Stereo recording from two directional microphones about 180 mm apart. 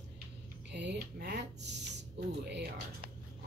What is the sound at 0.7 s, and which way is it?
Speech, 70° right (ahead or behind).